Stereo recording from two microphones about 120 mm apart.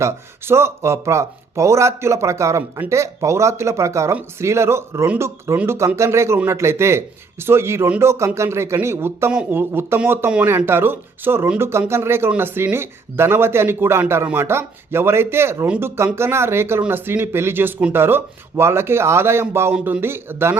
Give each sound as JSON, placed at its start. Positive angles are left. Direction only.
{"t": 0.0, "sound": "speech", "side_deg": -20}